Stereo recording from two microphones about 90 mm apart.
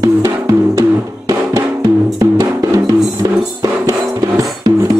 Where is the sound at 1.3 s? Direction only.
40° right (ahead or behind).